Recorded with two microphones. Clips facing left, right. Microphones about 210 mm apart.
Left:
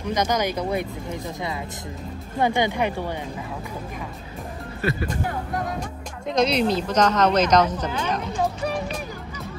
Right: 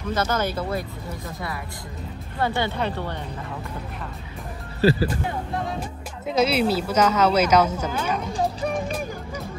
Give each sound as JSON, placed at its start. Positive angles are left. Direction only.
{"t": 0.1, "sound": "speech", "side_deg": 15}
{"t": 2.3, "sound": "speech", "side_deg": 15}
{"t": 4.8, "sound": "speech", "side_deg": -25}
{"t": 5.8, "sound": "speech", "side_deg": -5}